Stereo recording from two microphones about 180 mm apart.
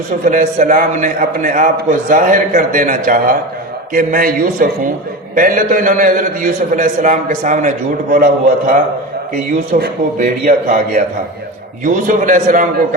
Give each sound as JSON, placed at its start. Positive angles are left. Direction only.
{"t": 0.3, "sound": "a man's voice", "side_deg": -45}